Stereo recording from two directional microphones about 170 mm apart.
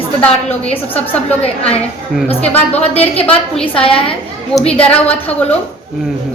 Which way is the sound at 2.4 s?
40° left (ahead or behind).